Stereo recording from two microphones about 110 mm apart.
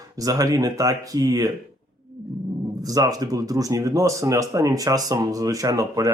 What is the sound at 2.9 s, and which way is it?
Speech, 35° right (ahead or behind).